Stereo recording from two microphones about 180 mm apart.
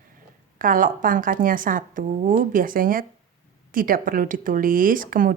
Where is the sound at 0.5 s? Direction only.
50° right (ahead or behind).